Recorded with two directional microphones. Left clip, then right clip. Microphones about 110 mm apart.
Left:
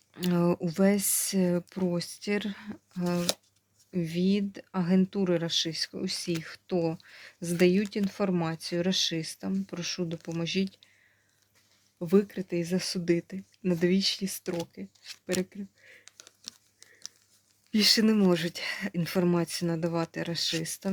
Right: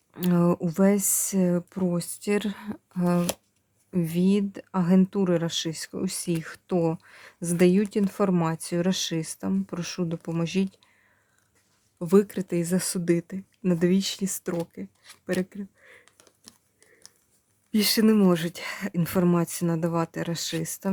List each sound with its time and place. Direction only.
0.1 s speech: 35° right (ahead or behind)
3.9 s speech: 55° right (ahead or behind)
6.9 s speech: 40° right (ahead or behind); by 8.3 s 55° right (ahead or behind)
8.3 s speech: 45° right (ahead or behind)
11.9 s speech: 35° right (ahead or behind)
13.3 s speech: 35° right (ahead or behind); by 14.5 s 55° right (ahead or behind)
14.5 s speech: 40° right (ahead or behind)
15.4 s a sound: 40° right (ahead or behind)
17.7 s speech: 30° right (ahead or behind)